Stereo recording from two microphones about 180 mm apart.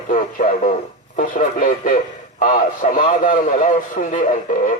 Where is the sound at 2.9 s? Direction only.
50° left (ahead or behind).